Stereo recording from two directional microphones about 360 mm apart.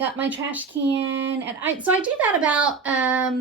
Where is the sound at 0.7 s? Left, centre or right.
Right.